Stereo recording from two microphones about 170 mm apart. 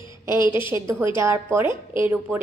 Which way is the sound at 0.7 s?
15° right (ahead or behind).